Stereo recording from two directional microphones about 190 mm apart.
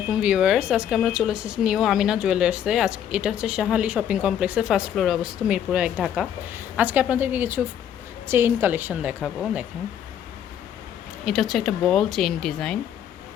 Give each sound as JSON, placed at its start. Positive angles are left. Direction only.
{"t": 0.1, "sound": "speech", "side_deg": -5}
{"t": 11.3, "sound": "speech", "side_deg": 0}